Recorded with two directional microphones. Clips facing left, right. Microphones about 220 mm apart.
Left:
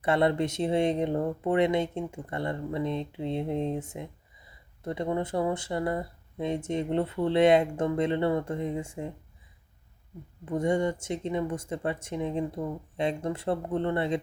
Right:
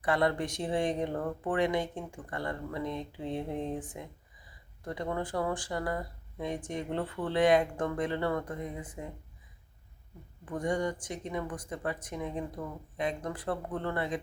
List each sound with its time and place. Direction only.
0.0 s speech: 25° left (ahead or behind)
10.4 s speech: 25° left (ahead or behind)